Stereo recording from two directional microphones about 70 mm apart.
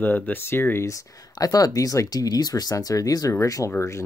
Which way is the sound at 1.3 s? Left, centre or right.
Left.